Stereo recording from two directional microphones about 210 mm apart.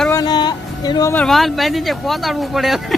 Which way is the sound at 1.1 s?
5° left (ahead or behind).